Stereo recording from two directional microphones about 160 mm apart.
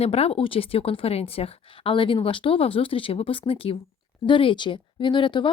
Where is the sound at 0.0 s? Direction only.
40° left (ahead or behind).